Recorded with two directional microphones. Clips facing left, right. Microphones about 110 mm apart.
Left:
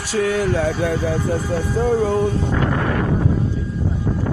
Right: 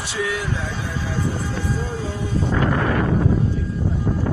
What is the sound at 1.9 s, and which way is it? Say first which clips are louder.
Speech: left 11 dB; 60° left (ahead or behind).